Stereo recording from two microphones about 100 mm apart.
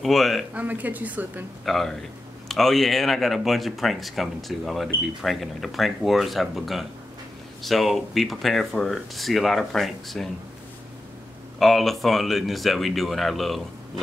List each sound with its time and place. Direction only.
0.0 s speech: centre (ahead or behind)
0.6 s a woman's voice: 15° right (ahead or behind)
1.7 s speech: centre (ahead or behind)
11.6 s speech: centre (ahead or behind)